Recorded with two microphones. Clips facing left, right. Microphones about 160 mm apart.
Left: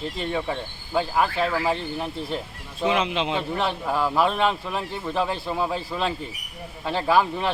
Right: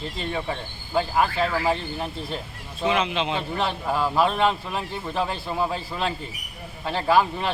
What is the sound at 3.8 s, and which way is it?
Speech, 10° right (ahead or behind).